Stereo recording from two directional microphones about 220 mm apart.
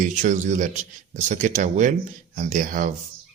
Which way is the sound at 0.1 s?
35° right (ahead or behind).